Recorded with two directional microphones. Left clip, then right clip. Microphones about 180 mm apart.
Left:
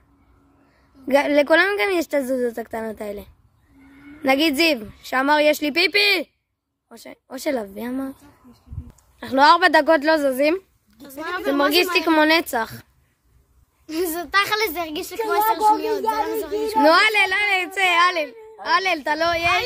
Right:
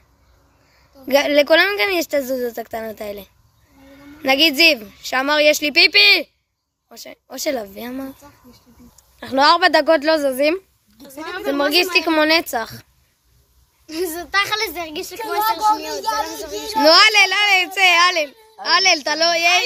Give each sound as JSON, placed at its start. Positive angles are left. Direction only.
{"t": 1.0, "sound": "a child's voice", "side_deg": 5}
{"t": 9.2, "sound": "a child's voice", "side_deg": 0}
{"t": 11.2, "sound": "a woman's voice", "side_deg": 75}
{"t": 11.5, "sound": "a child's voice", "side_deg": 5}
{"t": 13.8, "sound": "a woman's voice", "side_deg": 75}
{"t": 16.5, "sound": "a child's voice", "side_deg": 0}